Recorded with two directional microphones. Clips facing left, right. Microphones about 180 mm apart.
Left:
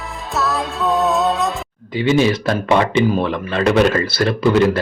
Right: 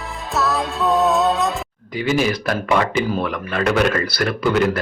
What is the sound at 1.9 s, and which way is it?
Speech, 25° left (ahead or behind).